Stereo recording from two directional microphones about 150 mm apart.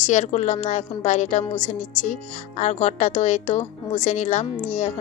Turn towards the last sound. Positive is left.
turn(degrees=50)  # may be behind; listen again after turning